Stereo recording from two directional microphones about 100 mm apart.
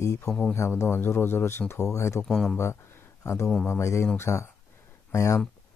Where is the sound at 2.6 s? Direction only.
25° left (ahead or behind).